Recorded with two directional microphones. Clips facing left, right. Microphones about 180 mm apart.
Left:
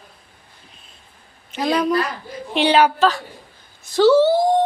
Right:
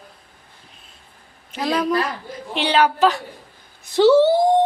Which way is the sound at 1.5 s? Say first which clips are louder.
Left 2 dB; centre (ahead or behind).